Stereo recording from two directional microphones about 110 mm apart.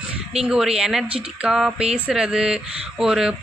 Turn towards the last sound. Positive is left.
turn(degrees=-5)  # may be behind; listen again after turning